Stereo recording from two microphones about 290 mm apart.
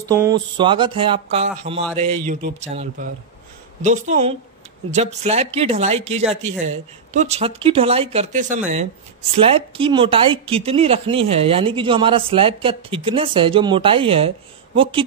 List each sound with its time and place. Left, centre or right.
0.1 s speech: centre